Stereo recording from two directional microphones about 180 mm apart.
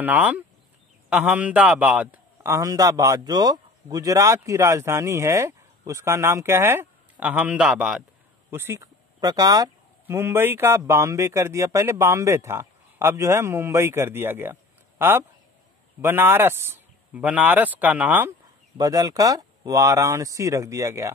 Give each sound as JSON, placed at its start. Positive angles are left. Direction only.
{"t": 0.0, "sound": "a man's voice", "side_deg": -10}
{"t": 18.8, "sound": "a man's voice", "side_deg": -20}